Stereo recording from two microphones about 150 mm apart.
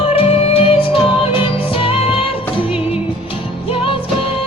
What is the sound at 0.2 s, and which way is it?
Music, 40° left (ahead or behind).